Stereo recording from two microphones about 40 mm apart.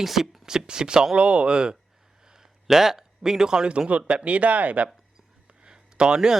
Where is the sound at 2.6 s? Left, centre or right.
Centre; by 4.9 s right.